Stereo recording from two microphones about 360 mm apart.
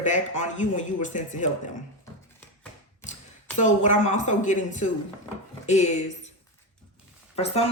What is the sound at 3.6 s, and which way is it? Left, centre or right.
A woman's voice, centre.